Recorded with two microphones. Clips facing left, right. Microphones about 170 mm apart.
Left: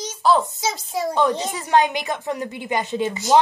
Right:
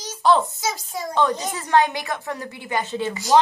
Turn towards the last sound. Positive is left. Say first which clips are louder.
# left 2 dB
turn(degrees=20)  # may be behind; listen again after turning